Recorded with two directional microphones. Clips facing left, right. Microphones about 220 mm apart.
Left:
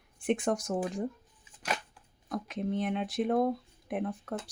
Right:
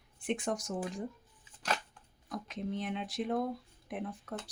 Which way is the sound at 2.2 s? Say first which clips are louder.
Left 5 dB; 55° left (ahead or behind).